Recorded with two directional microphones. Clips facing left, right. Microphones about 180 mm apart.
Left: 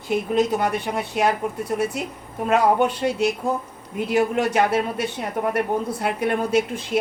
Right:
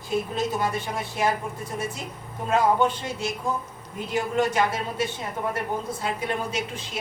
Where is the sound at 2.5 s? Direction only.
65° left (ahead or behind).